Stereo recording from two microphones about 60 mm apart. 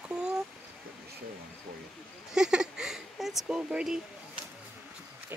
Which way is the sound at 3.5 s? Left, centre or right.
Centre.